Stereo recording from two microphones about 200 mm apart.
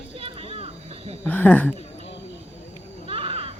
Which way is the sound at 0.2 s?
30° right (ahead or behind).